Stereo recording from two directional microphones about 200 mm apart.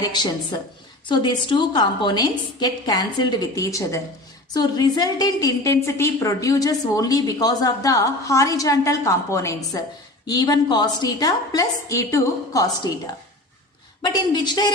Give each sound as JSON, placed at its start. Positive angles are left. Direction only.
{"t": 0.0, "sound": "a sound", "side_deg": 20}
{"t": 1.0, "sound": "a woman's voice", "side_deg": 20}
{"t": 14.0, "sound": "a woman's voice", "side_deg": 20}